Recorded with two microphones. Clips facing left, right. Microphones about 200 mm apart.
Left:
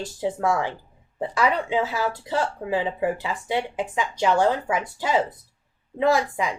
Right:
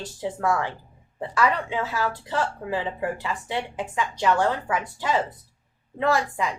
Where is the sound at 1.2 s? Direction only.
15° left (ahead or behind).